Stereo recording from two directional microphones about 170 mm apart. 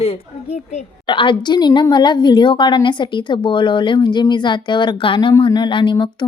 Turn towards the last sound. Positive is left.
turn(degrees=30)  # may be behind; listen again after turning